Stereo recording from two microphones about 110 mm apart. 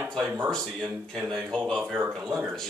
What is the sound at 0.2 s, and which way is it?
Speech, 10° right (ahead or behind).